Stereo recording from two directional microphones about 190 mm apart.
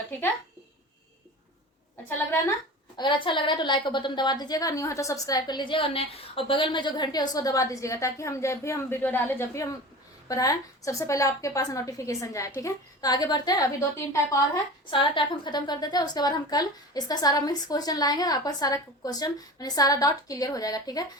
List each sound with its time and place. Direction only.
3.0 s a woman's voice: 25° left (ahead or behind)
14.8 s a woman's voice: 25° left (ahead or behind)